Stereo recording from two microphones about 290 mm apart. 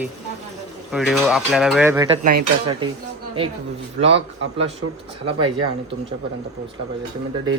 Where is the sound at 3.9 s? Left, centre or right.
Right.